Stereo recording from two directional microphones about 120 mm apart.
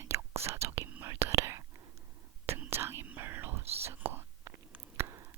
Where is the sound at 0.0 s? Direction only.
20° right (ahead or behind).